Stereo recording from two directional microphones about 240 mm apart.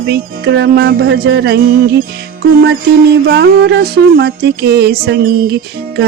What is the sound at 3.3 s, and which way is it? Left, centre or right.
Music, right.